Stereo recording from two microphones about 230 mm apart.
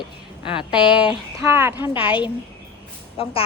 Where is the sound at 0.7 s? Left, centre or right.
Centre.